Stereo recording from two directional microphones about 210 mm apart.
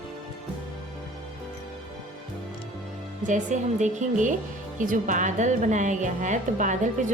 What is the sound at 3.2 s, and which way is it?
A woman's voice, 35° right (ahead or behind).